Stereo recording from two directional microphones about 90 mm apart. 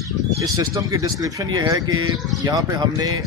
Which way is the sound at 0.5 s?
40° right (ahead or behind).